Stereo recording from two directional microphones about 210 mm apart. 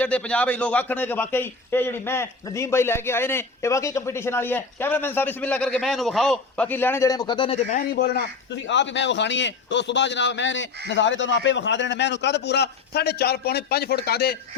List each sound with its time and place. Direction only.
0.0 s a man's voice: 5° left (ahead or behind); by 7.6 s 25° left (ahead or behind)
7.7 s speech: 50° left (ahead or behind)
8.6 s a man's voice: 60° left (ahead or behind)